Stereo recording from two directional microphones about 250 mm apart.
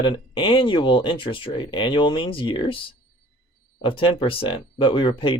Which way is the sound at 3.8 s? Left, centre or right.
Left.